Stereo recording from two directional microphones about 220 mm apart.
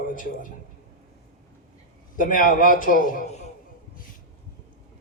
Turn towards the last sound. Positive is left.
turn(degrees=30)  # may be behind; listen again after turning